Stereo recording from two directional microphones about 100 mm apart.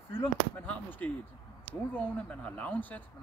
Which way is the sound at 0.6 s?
15° left (ahead or behind).